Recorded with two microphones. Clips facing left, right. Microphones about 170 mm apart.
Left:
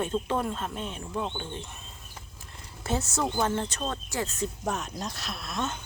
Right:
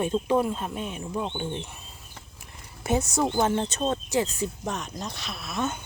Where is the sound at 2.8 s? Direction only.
15° right (ahead or behind).